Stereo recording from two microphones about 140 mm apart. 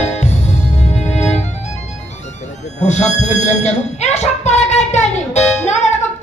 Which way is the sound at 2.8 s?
55° left (ahead or behind).